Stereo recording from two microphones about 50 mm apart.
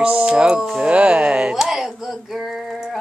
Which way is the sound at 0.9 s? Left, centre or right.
Centre.